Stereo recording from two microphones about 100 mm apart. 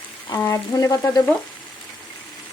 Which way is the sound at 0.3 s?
25° left (ahead or behind).